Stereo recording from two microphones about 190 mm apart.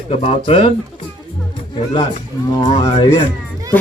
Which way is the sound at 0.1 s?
30° left (ahead or behind).